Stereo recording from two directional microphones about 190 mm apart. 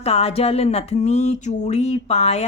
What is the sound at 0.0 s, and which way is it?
A woman's voice, 35° left (ahead or behind).